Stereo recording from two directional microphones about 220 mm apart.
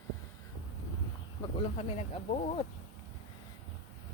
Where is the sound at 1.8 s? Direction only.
30° left (ahead or behind).